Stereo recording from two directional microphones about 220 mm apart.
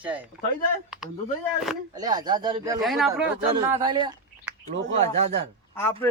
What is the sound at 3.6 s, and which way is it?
Speech, 15° right (ahead or behind).